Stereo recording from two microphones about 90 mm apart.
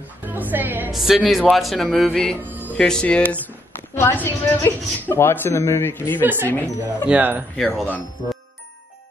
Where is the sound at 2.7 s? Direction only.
10° left (ahead or behind).